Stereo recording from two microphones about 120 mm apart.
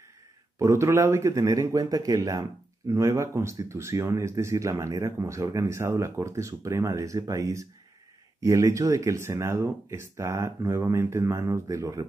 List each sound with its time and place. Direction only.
0.6 s speech: 25° right (ahead or behind)